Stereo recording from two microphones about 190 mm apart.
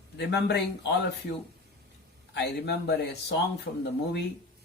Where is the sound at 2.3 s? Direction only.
65° left (ahead or behind).